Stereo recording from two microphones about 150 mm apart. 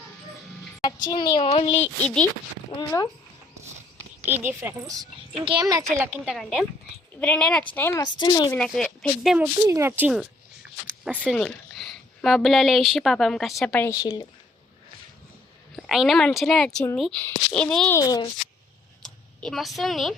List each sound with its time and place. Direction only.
1.0 s speech: 30° left (ahead or behind)
2.7 s speech: 25° left (ahead or behind)
4.3 s a woman's voice: 15° right (ahead or behind)
5.4 s a woman's voice: 30° right (ahead or behind)
6.2 s a woman's voice: centre (ahead or behind); by 8.0 s 15° left (ahead or behind)
8.0 s speech: 30° left (ahead or behind)
8.5 s a woman's voice: 5° left (ahead or behind)
9.6 s a woman's voice: 20° right (ahead or behind); by 13.8 s 5° left (ahead or behind)
13.8 s speech: 20° left (ahead or behind)
15.7 s a woman's voice: centre (ahead or behind)
17.9 s speech: 25° left (ahead or behind)
19.0 s speech: 5° left (ahead or behind)